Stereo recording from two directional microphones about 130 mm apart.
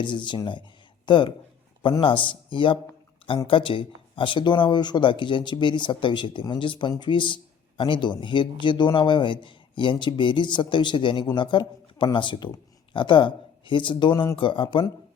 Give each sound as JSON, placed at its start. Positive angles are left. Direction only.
{"t": 0.0, "sound": "speech", "side_deg": 35}